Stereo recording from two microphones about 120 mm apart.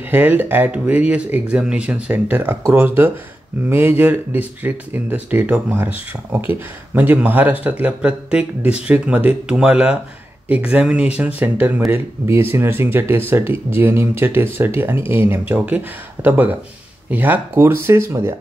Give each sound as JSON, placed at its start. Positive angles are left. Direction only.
{"t": 0.0, "sound": "speech", "side_deg": -15}